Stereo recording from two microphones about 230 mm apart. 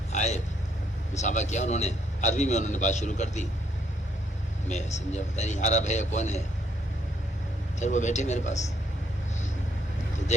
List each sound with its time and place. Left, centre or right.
0.1 s vehicle: left
1.1 s a man's voice: left
4.7 s a man's voice: left
7.8 s a man's voice: left